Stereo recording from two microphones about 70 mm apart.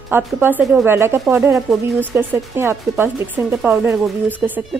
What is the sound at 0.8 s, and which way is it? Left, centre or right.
Speech, right.